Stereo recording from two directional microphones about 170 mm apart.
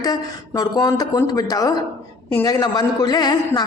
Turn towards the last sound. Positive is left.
turn(degrees=25)  # may be behind; listen again after turning